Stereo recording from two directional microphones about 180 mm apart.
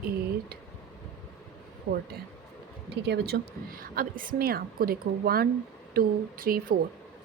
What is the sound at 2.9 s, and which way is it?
A woman's voice, 65° right (ahead or behind).